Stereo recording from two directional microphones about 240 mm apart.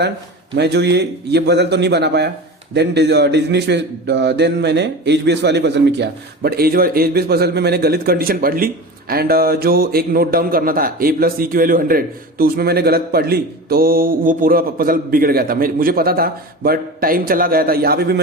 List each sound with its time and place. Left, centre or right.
0.5 s a man's voice: right